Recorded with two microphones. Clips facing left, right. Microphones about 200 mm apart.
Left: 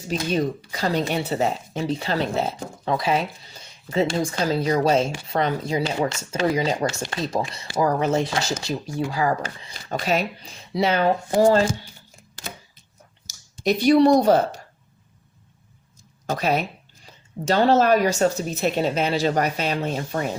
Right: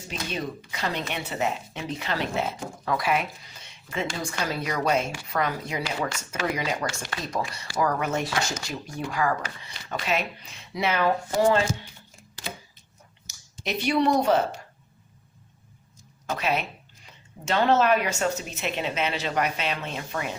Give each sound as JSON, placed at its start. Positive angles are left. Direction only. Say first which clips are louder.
{"t": 0.1, "sound": "speech", "louder": "left 9 dB", "side_deg": 40}
{"t": 9.7, "sound": "speech", "louder": "left 4 dB", "side_deg": 40}
{"t": 13.7, "sound": "speech", "louder": "left 8 dB", "side_deg": 35}
{"t": 16.3, "sound": "speech", "louder": "left 4 dB", "side_deg": 40}